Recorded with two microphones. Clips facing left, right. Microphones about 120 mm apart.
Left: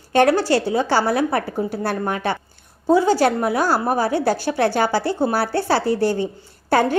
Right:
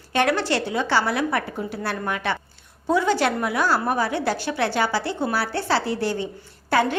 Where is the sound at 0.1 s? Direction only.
45° left (ahead or behind).